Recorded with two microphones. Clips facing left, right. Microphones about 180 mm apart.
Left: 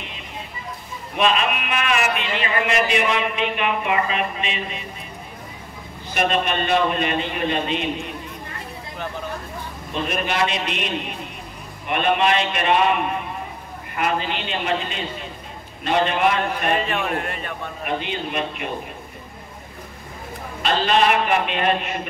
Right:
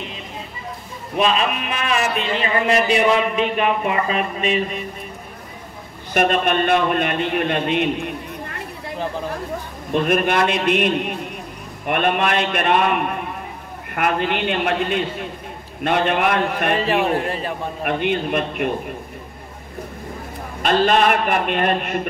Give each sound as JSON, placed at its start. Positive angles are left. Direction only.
{"t": 1.1, "sound": "a man's voice", "side_deg": -35}
{"t": 6.1, "sound": "a man's voice", "side_deg": -50}
{"t": 9.9, "sound": "a man's voice", "side_deg": -55}
{"t": 16.8, "sound": "a man's voice", "side_deg": -35}
{"t": 17.8, "sound": "a man's voice", "side_deg": -55}
{"t": 20.6, "sound": "a man's voice", "side_deg": -50}